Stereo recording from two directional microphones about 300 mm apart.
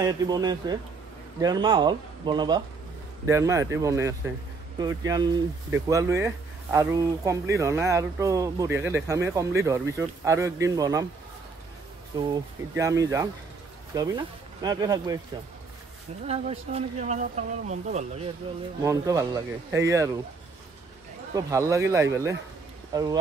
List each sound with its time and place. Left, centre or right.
0.0 s speech: centre
12.1 s speech: centre
16.3 s speech: right
18.8 s speech: centre
21.4 s speech: centre